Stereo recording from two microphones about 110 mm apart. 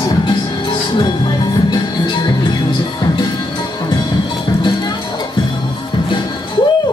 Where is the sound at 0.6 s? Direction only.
45° left (ahead or behind).